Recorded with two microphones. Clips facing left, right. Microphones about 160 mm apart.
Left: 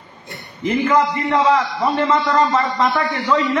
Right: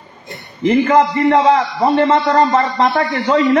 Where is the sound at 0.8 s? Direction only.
40° right (ahead or behind).